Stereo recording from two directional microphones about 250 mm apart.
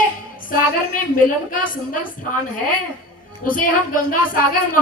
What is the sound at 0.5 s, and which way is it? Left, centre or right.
Speech, left.